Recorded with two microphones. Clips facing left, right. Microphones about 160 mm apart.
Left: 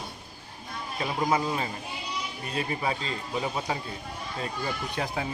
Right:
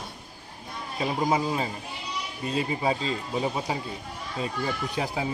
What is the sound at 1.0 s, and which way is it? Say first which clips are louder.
Speech: right 2 dB; 30° right (ahead or behind).